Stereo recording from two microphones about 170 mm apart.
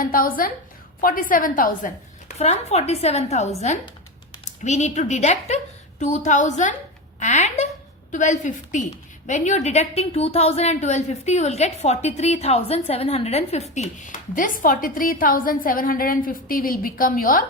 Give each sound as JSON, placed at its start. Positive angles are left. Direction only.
{"t": 0.0, "sound": "a woman's voice", "side_deg": 55}
{"t": 4.6, "sound": "a woman's voice", "side_deg": 45}